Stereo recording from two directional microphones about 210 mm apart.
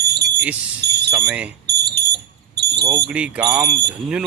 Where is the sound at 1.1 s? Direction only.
10° right (ahead or behind).